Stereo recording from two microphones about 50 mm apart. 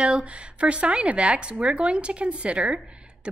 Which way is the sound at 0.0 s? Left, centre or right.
Right.